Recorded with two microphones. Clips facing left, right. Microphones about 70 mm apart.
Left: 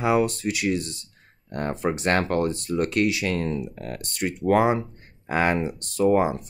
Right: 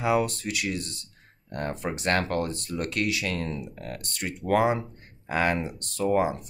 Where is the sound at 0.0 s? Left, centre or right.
Left.